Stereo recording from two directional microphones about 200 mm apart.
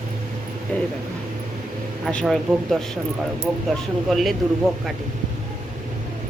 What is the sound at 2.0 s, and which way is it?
Speech, 5° left (ahead or behind).